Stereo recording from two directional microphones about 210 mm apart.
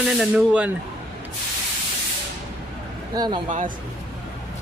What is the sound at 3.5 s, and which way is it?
Speech, 35° right (ahead or behind).